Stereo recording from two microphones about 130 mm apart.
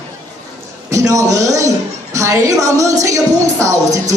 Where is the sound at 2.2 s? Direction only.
25° right (ahead or behind).